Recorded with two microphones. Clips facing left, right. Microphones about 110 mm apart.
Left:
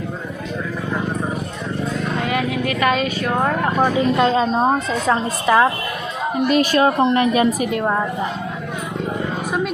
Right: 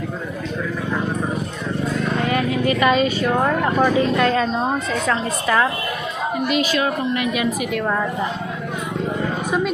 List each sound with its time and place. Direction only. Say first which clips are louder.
2.6 s speech: right 4 dB; centre (ahead or behind)
3.8 s a woman's voice: left 2 dB; 25° left (ahead or behind)
6.5 s a woman's voice: left 6 dB; 40° left (ahead or behind)